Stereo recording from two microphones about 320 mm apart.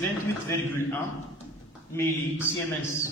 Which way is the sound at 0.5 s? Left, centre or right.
Centre.